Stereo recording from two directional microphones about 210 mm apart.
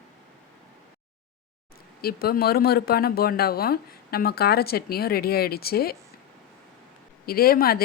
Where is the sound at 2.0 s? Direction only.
45° left (ahead or behind).